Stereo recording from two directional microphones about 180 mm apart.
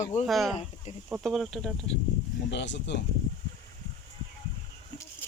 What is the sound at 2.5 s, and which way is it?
Speech, 75° left (ahead or behind).